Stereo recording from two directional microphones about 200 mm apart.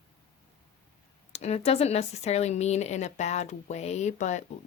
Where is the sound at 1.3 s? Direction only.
30° left (ahead or behind).